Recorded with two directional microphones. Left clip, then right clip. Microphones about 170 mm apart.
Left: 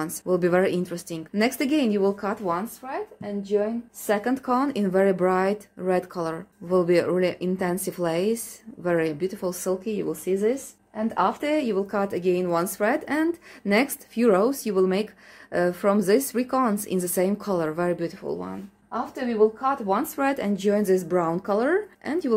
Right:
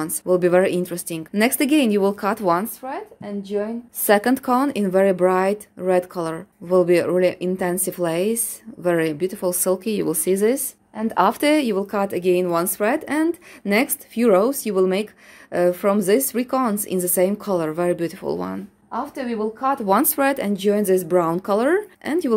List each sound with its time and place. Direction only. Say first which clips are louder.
0.0 s speech: right 5 dB; 25° right (ahead or behind); by 2.3 s 45° right (ahead or behind)
2.4 s speech: right 7 dB; 90° right
2.9 s speech: right 1 dB; 50° right (ahead or behind)
4.0 s speech: right 8 dB; 90° right
4.3 s speech: right 5 dB; 45° right (ahead or behind); by 11.5 s 75° right (ahead or behind)
11.5 s speech: right 4 dB; 40° right (ahead or behind)
18.2 s speech: right 6 dB; 55° right (ahead or behind); by 20.1 s 80° right
20.2 s speech: right 5 dB; 35° right (ahead or behind)